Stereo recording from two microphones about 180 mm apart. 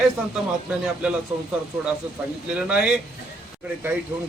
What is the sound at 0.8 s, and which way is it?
Speech, 5° right (ahead or behind).